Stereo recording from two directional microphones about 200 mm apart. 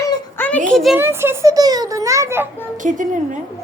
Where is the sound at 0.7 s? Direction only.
Centre (ahead or behind).